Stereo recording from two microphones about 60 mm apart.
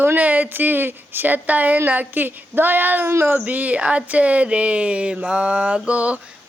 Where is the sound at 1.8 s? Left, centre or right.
Right.